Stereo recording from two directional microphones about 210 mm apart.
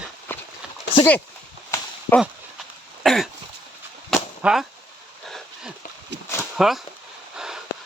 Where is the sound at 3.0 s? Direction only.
Centre (ahead or behind).